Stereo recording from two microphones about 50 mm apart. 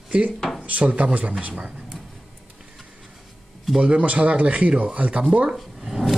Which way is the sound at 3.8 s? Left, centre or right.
Right.